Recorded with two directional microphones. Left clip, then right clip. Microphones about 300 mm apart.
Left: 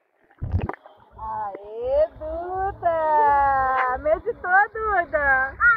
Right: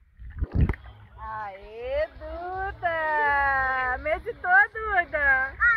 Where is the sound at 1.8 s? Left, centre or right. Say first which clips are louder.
Left 7 dB; right.